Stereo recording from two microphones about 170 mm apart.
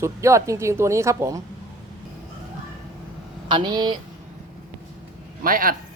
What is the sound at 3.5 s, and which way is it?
Speech, 25° right (ahead or behind).